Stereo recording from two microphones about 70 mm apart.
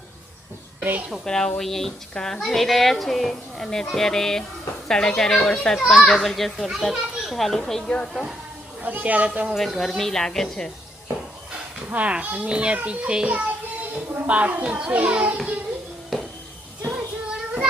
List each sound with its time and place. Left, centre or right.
0.8 s a woman's voice: right
1.2 s a woman's voice: centre
8.1 s a child's voice: centre
8.8 s a child's voice: right
9.6 s a woman's voice: centre
11.9 s a child's voice: centre
16.1 s a sound: centre
16.9 s child singing: centre